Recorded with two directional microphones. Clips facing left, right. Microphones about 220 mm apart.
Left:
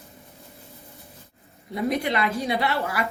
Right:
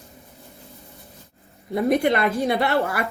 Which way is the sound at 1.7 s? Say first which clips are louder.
Right 5 dB; 55° right (ahead or behind).